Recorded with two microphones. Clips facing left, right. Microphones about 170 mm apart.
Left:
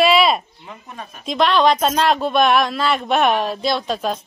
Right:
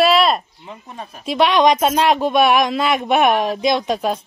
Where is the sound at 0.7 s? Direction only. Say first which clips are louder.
Right 2 dB; 25° right (ahead or behind).